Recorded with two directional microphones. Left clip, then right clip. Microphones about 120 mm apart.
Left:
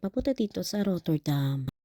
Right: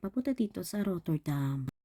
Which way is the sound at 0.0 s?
35° left (ahead or behind).